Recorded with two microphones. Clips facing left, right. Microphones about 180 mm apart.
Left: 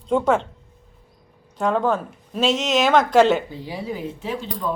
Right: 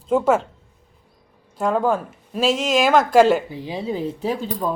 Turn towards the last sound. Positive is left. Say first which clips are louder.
# right 4 dB
turn(degrees=-40)  # may be behind; listen again after turning